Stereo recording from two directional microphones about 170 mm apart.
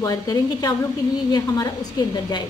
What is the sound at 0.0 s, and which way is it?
A woman's voice, 20° left (ahead or behind).